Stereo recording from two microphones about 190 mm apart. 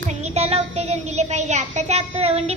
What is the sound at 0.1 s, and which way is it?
A child's voice, 35° right (ahead or behind).